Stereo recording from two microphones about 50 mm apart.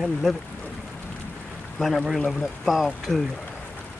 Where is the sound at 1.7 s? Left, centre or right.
Centre.